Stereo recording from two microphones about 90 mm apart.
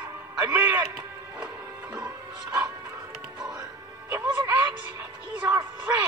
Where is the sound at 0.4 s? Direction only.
20° right (ahead or behind).